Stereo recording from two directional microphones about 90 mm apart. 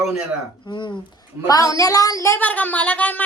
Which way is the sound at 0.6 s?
60° left (ahead or behind).